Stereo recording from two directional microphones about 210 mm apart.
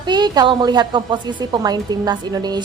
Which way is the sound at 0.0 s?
20° right (ahead or behind).